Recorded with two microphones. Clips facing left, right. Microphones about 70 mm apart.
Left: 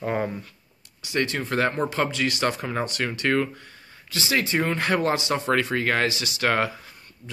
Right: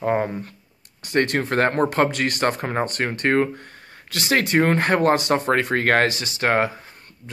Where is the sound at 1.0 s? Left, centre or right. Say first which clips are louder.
Right 5 dB; right.